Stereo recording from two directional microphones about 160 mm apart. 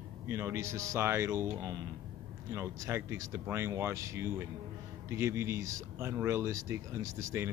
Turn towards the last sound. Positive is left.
turn(degrees=-15)  # may be behind; listen again after turning